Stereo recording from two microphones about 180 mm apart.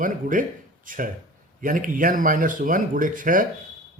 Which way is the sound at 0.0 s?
50° right (ahead or behind).